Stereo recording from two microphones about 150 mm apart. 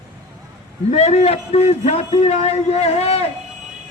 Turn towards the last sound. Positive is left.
turn(degrees=45)  # may be behind; listen again after turning